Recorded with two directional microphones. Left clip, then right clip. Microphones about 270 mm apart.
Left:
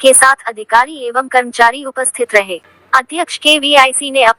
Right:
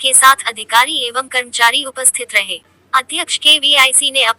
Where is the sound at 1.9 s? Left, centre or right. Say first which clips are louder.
Left 4 dB; centre.